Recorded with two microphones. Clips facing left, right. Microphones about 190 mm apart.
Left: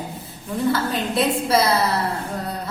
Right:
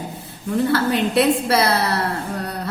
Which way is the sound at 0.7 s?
65° right (ahead or behind).